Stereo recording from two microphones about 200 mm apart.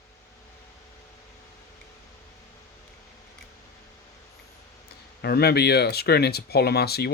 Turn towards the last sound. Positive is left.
turn(degrees=55)  # may be behind; listen again after turning